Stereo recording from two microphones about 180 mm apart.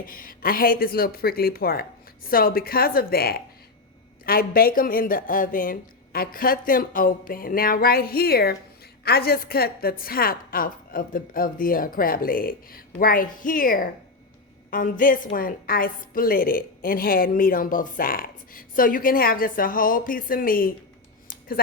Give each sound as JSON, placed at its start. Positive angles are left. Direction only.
{"t": 0.0, "sound": "a woman's voice", "side_deg": 50}